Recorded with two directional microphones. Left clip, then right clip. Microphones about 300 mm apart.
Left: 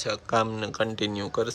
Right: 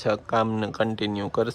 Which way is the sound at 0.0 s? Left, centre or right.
Centre.